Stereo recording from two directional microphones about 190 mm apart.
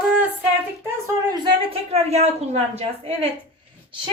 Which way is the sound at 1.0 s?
20° right (ahead or behind).